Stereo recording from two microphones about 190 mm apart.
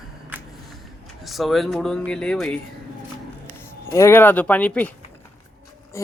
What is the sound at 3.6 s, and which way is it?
Speech, 15° left (ahead or behind).